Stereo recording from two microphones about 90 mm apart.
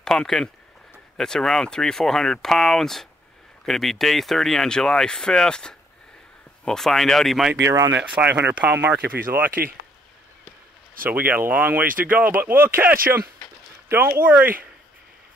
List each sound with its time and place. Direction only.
0.0 s speech: 5° left (ahead or behind)
7.6 s speech: 30° right (ahead or behind)
8.2 s speech: 20° right (ahead or behind)
11.1 s speech: 20° right (ahead or behind)